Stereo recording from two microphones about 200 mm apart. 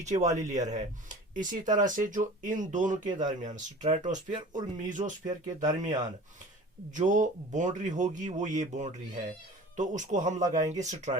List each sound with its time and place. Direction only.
0.0 s speech: 35° right (ahead or behind)
6.9 s speech: 40° right (ahead or behind)